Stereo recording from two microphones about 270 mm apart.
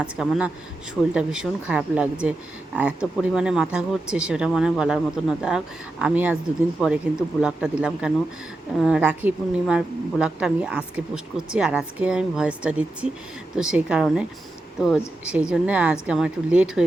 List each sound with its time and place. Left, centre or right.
0.0 s a woman's voice: centre